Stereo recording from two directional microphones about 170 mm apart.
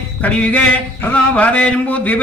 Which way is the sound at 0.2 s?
10° left (ahead or behind).